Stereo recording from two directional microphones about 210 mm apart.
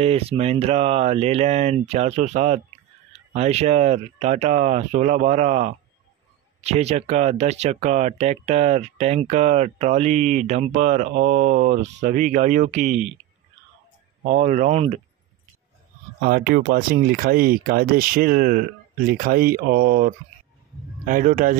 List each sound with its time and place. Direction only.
0.0 s speech: 30° right (ahead or behind)
14.2 s speech: 35° right (ahead or behind)
16.2 s speech: 45° right (ahead or behind)